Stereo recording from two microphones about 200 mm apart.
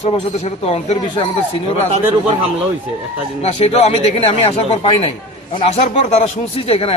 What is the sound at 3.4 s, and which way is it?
A man's voice, 30° left (ahead or behind).